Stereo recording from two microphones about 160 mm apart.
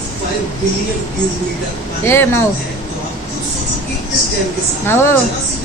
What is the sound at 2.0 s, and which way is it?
Speech, 15° left (ahead or behind).